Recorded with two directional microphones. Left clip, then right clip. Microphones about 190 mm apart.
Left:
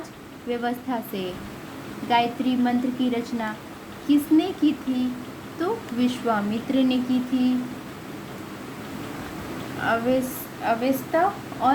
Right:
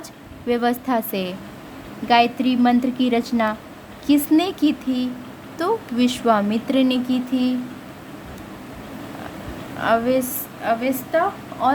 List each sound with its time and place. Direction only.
0.5 s a woman's voice: 60° right (ahead or behind)
9.8 s speech: 50° right (ahead or behind)
10.6 s a woman's voice: 35° right (ahead or behind)